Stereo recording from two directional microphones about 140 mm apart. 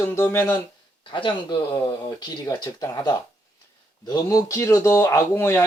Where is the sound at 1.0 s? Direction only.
35° left (ahead or behind).